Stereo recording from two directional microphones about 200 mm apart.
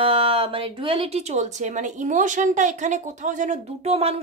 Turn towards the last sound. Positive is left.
turn(degrees=-30)  # may be behind; listen again after turning